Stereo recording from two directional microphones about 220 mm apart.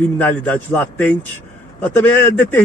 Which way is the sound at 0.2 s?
5° left (ahead or behind).